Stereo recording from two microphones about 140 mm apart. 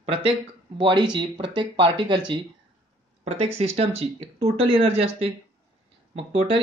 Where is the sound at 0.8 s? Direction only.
35° right (ahead or behind).